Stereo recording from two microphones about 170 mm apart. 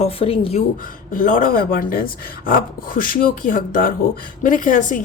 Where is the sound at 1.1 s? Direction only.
50° left (ahead or behind).